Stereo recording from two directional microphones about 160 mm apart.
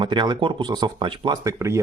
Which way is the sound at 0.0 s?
30° right (ahead or behind).